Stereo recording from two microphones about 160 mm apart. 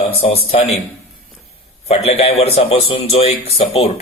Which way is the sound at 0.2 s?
35° left (ahead or behind).